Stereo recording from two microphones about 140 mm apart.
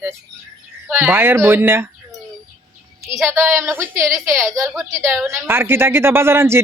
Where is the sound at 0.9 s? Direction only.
15° right (ahead or behind).